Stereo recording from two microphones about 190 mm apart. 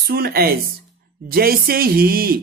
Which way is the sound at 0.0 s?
55° right (ahead or behind).